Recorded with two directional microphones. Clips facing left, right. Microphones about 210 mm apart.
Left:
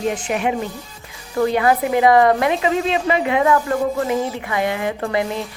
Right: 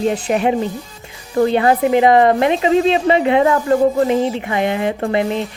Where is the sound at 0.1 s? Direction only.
35° right (ahead or behind).